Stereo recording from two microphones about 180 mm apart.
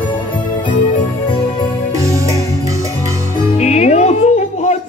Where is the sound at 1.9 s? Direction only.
15° right (ahead or behind).